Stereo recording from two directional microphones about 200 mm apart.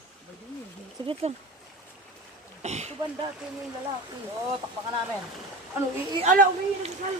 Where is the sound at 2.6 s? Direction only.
35° right (ahead or behind).